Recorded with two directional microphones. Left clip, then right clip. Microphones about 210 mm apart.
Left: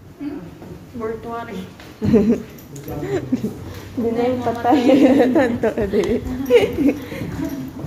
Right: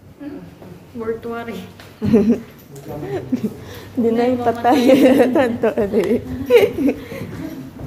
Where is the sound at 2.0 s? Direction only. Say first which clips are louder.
Right 1 dB; 10° right (ahead or behind).